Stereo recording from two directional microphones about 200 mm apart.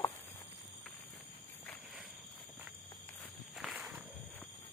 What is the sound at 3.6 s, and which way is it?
Walk, centre (ahead or behind).